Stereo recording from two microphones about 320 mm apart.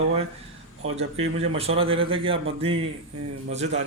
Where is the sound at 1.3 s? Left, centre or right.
Centre.